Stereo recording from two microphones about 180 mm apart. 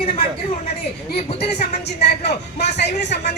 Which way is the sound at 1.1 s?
40° left (ahead or behind).